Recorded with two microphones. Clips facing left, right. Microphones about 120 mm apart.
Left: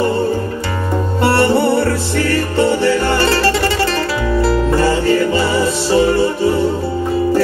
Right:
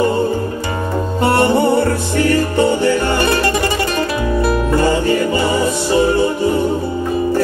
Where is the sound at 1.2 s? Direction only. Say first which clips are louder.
Even; 20° right (ahead or behind).